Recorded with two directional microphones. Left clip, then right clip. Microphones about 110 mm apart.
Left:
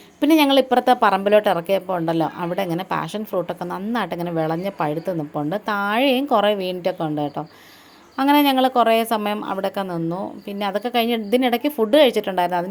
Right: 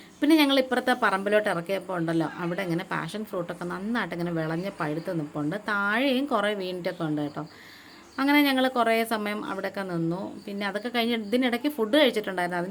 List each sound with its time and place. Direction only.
0.2 s speech: 40° left (ahead or behind)